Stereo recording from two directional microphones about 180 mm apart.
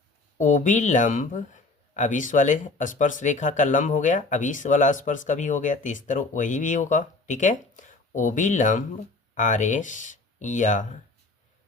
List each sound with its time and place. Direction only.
0.3 s speech: 45° left (ahead or behind)